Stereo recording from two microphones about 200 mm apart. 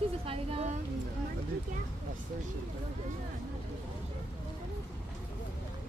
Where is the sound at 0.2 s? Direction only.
30° right (ahead or behind).